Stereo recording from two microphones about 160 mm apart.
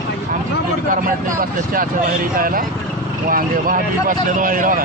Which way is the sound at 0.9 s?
60° right (ahead or behind).